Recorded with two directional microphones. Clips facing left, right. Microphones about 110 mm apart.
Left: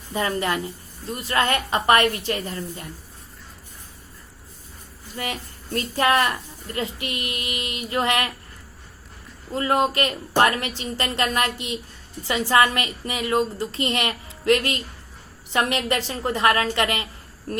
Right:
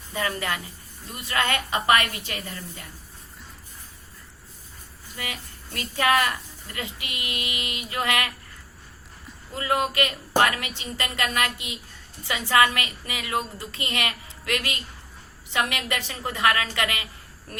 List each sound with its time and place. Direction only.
0.1 s a woman's voice: 30° left (ahead or behind)
5.1 s a woman's voice: 35° left (ahead or behind)
9.5 s a woman's voice: 35° left (ahead or behind)